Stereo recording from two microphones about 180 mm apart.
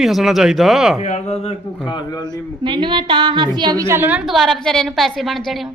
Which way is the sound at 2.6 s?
25° right (ahead or behind).